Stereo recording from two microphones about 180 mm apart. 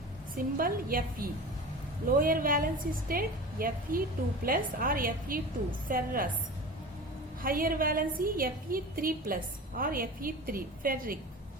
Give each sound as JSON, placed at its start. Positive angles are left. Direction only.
{"t": 0.3, "sound": "a woman's voice", "side_deg": -55}
{"t": 7.4, "sound": "a woman's voice", "side_deg": -50}